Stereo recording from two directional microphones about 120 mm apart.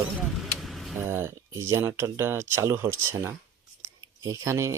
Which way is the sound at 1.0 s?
20° right (ahead or behind).